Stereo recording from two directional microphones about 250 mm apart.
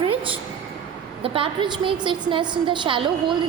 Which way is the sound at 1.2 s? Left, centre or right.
Right.